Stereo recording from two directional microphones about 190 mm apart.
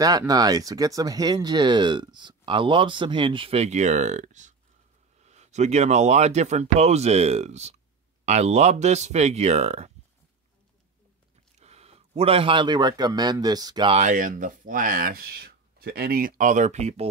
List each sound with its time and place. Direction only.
0.0 s speech: 20° right (ahead or behind); by 9.9 s 35° right (ahead or behind)
11.6 s a man's voice: 35° right (ahead or behind)
13.9 s speech: 40° right (ahead or behind)